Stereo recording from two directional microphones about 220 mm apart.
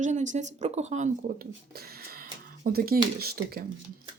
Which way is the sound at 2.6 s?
40° right (ahead or behind).